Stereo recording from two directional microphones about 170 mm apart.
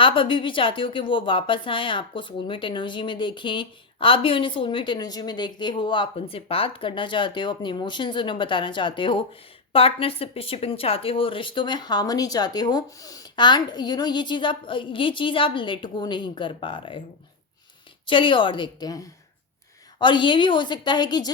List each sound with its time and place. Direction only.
0.0 s a woman's voice: 30° left (ahead or behind)
18.0 s a woman's voice: 30° left (ahead or behind)